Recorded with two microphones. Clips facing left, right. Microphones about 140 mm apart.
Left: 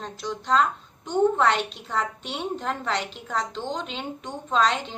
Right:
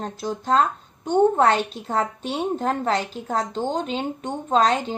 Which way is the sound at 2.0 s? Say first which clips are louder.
Right 5 dB; 35° right (ahead or behind).